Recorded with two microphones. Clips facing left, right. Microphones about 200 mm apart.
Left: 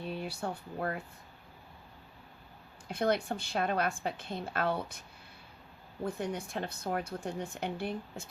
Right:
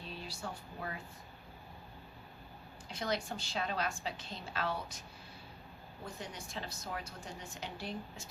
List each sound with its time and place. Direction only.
0.0 s speech: 60° left (ahead or behind)
2.9 s a woman's voice: 55° left (ahead or behind)
6.1 s a woman's voice: 60° left (ahead or behind)